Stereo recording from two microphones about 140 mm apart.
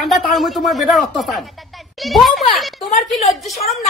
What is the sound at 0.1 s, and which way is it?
Speech, centre (ahead or behind).